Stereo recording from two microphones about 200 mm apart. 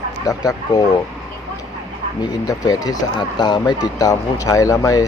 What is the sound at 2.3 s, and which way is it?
Speech, 20° left (ahead or behind).